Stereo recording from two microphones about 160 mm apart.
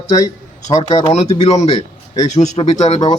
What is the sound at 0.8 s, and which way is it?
A man's voice, 40° left (ahead or behind).